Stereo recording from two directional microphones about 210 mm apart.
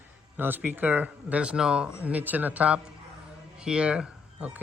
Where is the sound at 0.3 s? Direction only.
10° right (ahead or behind).